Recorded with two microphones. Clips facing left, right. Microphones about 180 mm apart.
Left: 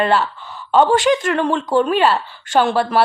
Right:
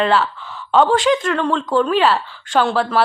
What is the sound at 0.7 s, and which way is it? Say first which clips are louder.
A woman's voice: left 1 dB; 10° left (ahead or behind).